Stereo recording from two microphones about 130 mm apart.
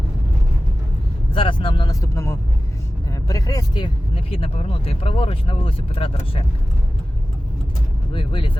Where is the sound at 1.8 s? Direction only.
25° left (ahead or behind).